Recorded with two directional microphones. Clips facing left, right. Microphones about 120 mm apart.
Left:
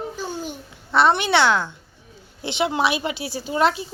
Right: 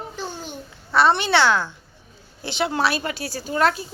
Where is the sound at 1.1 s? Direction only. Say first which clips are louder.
Even; 15° left (ahead or behind).